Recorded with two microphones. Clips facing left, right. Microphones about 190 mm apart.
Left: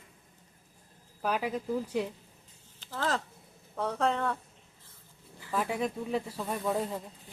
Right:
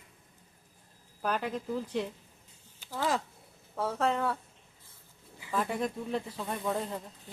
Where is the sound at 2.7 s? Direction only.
10° right (ahead or behind).